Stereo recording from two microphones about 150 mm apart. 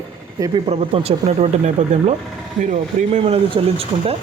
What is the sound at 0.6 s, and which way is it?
Speech, 40° right (ahead or behind).